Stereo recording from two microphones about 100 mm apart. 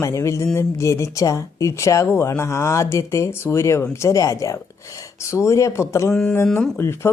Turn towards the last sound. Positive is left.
turn(degrees=25)  # may be behind; listen again after turning